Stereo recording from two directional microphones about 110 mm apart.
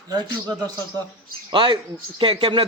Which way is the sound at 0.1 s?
40° right (ahead or behind).